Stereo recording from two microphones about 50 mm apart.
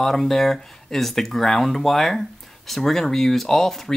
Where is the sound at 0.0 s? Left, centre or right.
Centre.